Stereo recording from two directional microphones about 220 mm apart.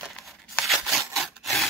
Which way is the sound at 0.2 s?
Centre (ahead or behind).